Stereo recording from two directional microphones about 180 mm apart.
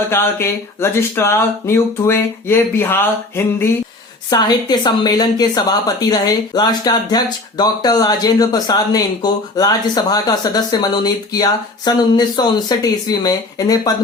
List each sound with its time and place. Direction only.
0.1 s a woman's voice: 15° left (ahead or behind)